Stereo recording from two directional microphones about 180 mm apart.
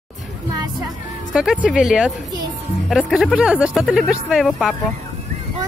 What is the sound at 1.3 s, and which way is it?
Speech, 5° right (ahead or behind).